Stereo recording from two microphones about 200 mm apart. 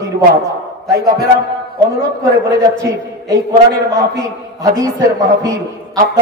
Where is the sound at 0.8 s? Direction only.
15° right (ahead or behind).